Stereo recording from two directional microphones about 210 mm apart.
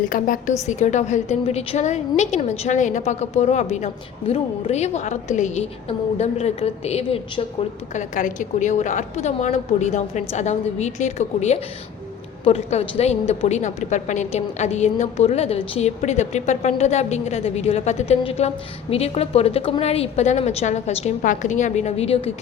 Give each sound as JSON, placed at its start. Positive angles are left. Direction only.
{"t": 0.1, "sound": "a woman's voice", "side_deg": 40}